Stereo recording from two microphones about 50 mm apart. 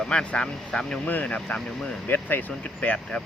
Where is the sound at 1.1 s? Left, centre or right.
Left.